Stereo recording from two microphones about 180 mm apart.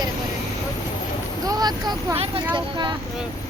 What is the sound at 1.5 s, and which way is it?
Speech, 20° right (ahead or behind).